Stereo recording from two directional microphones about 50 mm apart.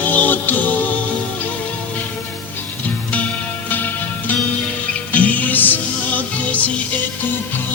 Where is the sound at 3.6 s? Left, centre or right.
Left.